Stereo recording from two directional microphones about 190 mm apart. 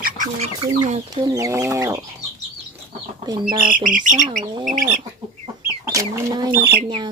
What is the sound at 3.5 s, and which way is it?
Speech, 45° right (ahead or behind).